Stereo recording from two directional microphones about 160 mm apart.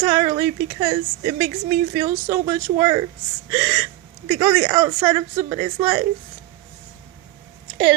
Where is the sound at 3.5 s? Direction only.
45° right (ahead or behind).